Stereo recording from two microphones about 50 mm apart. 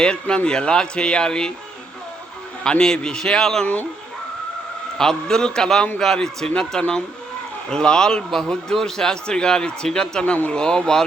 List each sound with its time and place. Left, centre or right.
0.0 s a man's voice: centre
2.6 s a man's voice: centre
4.9 s a man's voice: centre